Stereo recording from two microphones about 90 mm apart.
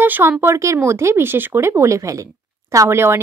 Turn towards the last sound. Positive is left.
turn(degrees=-30)  # may be behind; listen again after turning